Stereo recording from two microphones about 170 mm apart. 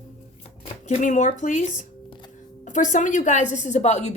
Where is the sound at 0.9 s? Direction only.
45° left (ahead or behind).